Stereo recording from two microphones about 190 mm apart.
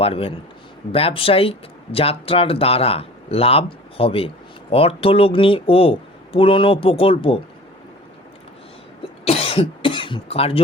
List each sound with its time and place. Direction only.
0.0 s speech: 30° left (ahead or behind)
9.2 s cough: 35° left (ahead or behind)